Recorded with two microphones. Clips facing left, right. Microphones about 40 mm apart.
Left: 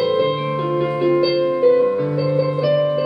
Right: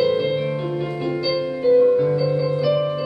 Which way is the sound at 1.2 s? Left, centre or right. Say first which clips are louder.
Left 6 dB; centre.